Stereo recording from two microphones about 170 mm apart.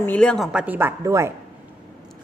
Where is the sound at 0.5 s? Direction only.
10° right (ahead or behind).